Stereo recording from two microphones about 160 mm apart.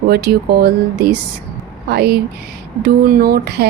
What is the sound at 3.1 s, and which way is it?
Speech, 75° right (ahead or behind).